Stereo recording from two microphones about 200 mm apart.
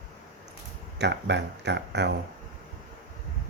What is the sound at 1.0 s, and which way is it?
Speech, 60° right (ahead or behind).